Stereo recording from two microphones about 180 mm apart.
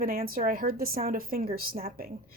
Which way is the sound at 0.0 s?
55° right (ahead or behind).